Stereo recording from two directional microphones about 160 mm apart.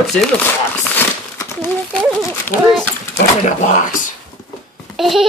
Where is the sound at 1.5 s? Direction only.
15° left (ahead or behind).